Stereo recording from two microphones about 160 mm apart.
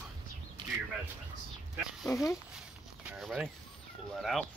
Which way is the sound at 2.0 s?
Centre (ahead or behind).